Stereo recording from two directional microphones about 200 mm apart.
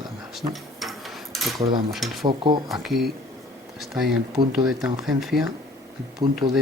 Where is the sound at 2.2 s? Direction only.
25° right (ahead or behind).